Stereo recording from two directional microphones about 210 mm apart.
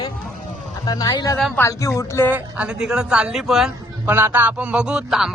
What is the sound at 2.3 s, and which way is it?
Speech, 5° right (ahead or behind).